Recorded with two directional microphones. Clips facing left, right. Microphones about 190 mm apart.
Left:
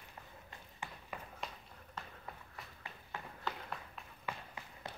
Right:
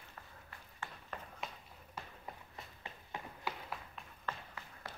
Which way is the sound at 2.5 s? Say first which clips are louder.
Right 1 dB; 25° right (ahead or behind).